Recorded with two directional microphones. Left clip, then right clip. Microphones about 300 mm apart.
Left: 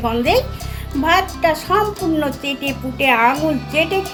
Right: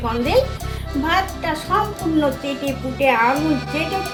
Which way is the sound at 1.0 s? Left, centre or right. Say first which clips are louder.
Left 5 dB; left.